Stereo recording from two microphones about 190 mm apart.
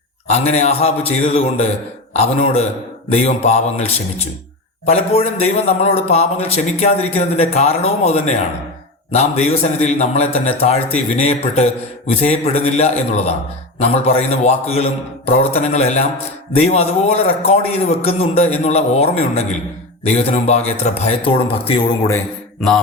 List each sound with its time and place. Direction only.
0.3 s a man's voice: 35° left (ahead or behind)